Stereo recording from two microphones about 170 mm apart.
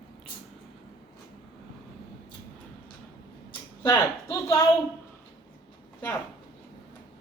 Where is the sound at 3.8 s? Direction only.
15° left (ahead or behind).